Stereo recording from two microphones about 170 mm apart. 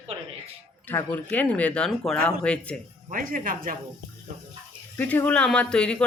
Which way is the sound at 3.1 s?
55° right (ahead or behind).